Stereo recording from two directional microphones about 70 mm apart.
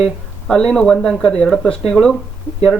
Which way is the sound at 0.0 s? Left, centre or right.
Centre.